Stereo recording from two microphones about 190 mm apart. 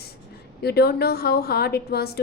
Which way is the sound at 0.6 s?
60° left (ahead or behind).